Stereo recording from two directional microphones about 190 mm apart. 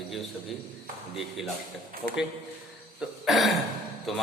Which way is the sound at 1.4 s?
Centre (ahead or behind).